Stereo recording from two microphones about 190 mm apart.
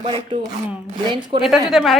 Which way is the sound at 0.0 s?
25° right (ahead or behind).